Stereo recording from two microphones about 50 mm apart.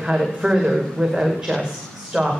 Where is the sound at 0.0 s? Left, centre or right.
Centre.